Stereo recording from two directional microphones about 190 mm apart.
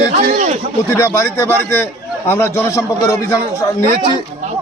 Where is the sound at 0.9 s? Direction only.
15° left (ahead or behind).